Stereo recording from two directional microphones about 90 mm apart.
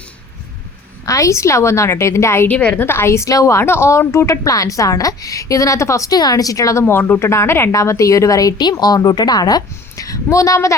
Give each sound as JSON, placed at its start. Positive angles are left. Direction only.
{"t": 1.0, "sound": "a woman's voice", "side_deg": 35}
{"t": 2.6, "sound": "a woman's voice", "side_deg": 15}
{"t": 2.8, "sound": "a woman's voice", "side_deg": 25}
{"t": 6.8, "sound": "a woman's voice", "side_deg": 25}